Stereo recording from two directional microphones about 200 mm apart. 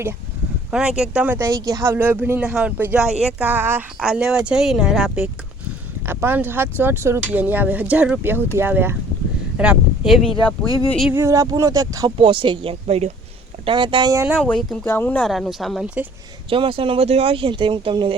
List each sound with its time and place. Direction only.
0.7 s speech: 5° right (ahead or behind)
10.2 s speech: 25° left (ahead or behind)
10.8 s speech: 5° left (ahead or behind)
11.1 s speech: 15° right (ahead or behind)
14.4 s speech: 5° left (ahead or behind)
16.5 s speech: 25° right (ahead or behind)